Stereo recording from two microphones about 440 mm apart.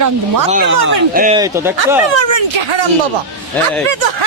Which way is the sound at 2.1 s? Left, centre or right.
Right.